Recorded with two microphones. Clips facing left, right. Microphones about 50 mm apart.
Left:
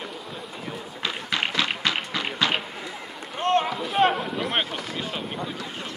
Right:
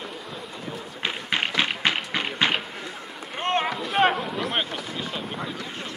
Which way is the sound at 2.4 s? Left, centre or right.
Right.